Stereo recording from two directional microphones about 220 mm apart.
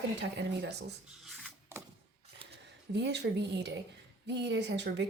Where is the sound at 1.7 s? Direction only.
10° right (ahead or behind).